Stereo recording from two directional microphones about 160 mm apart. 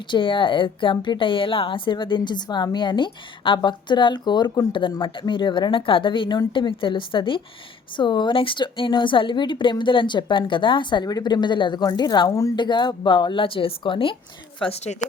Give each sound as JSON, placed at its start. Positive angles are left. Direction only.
{"t": 0.1, "sound": "a woman's voice", "side_deg": 30}